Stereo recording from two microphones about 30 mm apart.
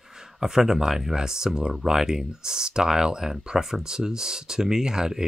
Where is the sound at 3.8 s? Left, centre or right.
Right.